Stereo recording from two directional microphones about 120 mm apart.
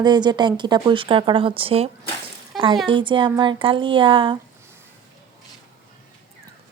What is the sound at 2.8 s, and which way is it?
Speech, 45° right (ahead or behind).